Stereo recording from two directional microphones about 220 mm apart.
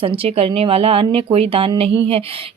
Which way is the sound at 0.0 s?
25° right (ahead or behind).